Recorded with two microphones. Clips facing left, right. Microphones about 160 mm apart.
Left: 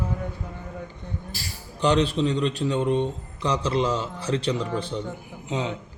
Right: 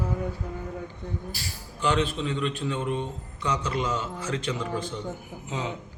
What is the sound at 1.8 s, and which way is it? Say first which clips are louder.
A man's voice: left 5 dB; 35° left (ahead or behind).